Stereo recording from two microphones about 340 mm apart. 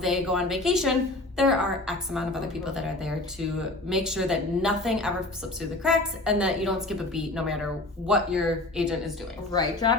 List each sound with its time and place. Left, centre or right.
0.0 s a woman's voice: centre
9.5 s speech: centre